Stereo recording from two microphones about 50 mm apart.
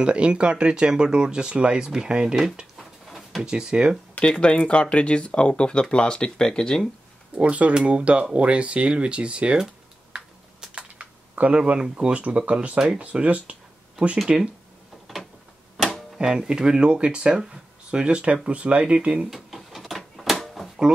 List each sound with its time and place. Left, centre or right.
0.0 s speech: right
2.8 s a sound: centre
3.4 s speech: centre
4.3 s speech: left
7.3 s speech: right
10.1 s typing: centre
11.9 s speech: right
14.1 s speech: centre
16.3 s speech: centre
19.3 s a sound: centre